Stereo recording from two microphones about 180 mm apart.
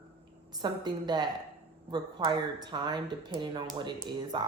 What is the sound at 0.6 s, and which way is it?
Speech, 25° right (ahead or behind).